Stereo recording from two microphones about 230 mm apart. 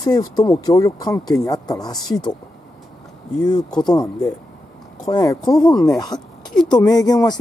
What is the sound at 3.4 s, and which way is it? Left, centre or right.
Speech, centre.